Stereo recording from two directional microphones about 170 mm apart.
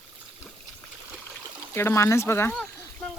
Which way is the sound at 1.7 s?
15° left (ahead or behind).